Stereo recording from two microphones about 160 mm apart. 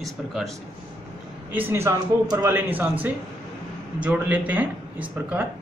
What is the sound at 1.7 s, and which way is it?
Speech, 15° right (ahead or behind).